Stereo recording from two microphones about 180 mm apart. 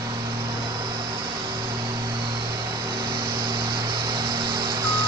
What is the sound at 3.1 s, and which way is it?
Vehicle, 25° right (ahead or behind).